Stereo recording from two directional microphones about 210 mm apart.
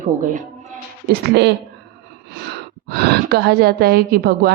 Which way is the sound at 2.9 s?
50° right (ahead or behind).